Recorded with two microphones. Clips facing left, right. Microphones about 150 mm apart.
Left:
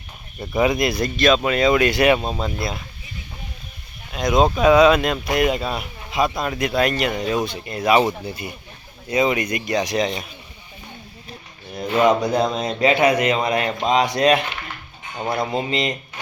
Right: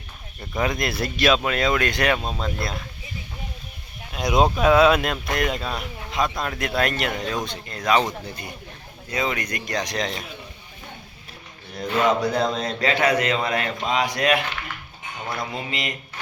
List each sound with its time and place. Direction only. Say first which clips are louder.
0.5 s speech: left 6 dB; 5° left (ahead or behind)
4.1 s a man's voice: left 2 dB; 10° right (ahead or behind)
11.8 s a man's voice: left 4 dB; 15° left (ahead or behind)